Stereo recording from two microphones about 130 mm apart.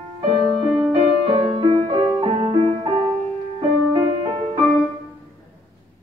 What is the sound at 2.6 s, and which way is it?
Music, 45° right (ahead or behind).